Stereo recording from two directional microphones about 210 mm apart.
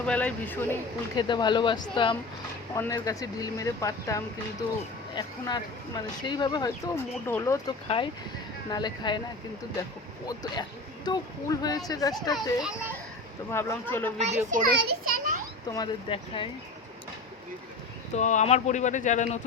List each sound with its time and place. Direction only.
0.0 s speech: 5° left (ahead or behind)
1.1 s speech: 20° left (ahead or behind)
7.9 s speech: 25° left (ahead or behind)
10.2 s speech: 20° left (ahead or behind)
14.5 s a child's voice: 40° right (ahead or behind)
15.7 s speech: 20° left (ahead or behind)
18.1 s speech: 35° left (ahead or behind)